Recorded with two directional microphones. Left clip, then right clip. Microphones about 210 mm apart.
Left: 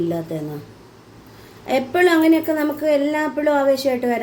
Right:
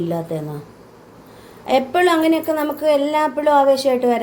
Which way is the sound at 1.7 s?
5° left (ahead or behind).